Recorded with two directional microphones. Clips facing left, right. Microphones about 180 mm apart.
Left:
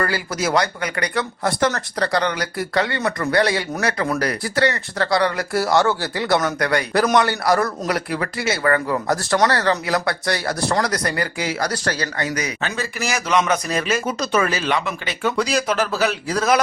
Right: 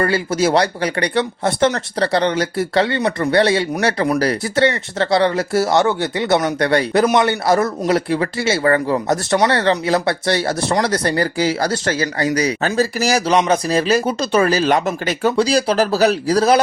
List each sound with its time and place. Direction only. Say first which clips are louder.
0.0 s speech: right 6 dB; 25° right (ahead or behind)